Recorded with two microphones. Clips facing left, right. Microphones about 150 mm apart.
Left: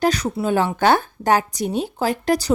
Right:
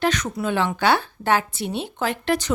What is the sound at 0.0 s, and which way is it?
Speech, 35° left (ahead or behind).